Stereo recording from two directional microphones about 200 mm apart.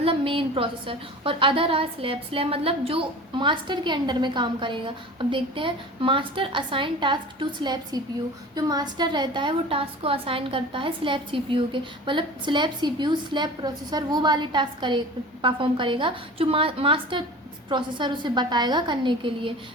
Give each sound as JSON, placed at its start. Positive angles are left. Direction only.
{"t": 0.0, "sound": "a woman's voice", "side_deg": -25}